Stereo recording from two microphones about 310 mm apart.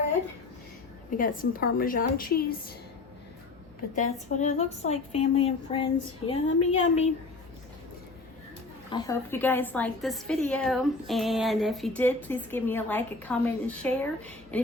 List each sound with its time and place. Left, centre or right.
1.1 s a woman's voice: left
3.9 s a woman's voice: left
8.9 s a woman's voice: centre